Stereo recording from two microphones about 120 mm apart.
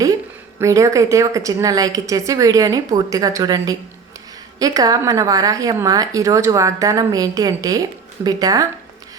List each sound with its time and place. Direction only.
0.6 s a woman's voice: 25° right (ahead or behind)